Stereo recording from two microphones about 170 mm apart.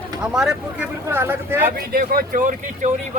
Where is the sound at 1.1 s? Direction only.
15° right (ahead or behind).